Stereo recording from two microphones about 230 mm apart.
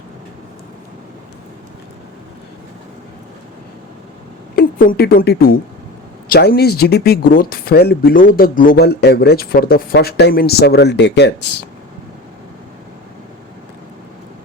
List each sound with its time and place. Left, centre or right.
4.5 s a woman's voice: left